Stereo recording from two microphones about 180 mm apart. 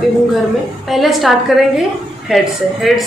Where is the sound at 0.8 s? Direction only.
Centre (ahead or behind).